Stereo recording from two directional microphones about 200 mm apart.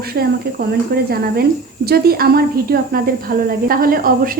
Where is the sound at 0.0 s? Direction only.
50° right (ahead or behind).